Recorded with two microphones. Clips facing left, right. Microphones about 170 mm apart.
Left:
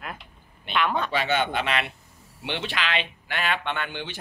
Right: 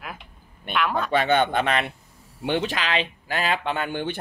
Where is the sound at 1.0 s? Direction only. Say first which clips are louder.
Right 5 dB; 50° right (ahead or behind).